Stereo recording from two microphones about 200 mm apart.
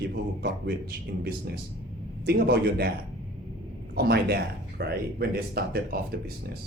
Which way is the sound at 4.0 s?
55° right (ahead or behind).